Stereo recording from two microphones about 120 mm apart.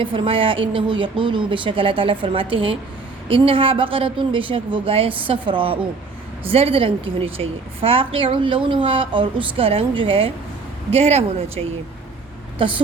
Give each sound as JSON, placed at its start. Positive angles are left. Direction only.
{"t": 0.0, "sound": "a woman's voice", "side_deg": -45}
{"t": 12.5, "sound": "speech", "side_deg": -45}